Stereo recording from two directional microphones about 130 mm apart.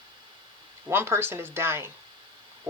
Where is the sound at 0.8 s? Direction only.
20° right (ahead or behind).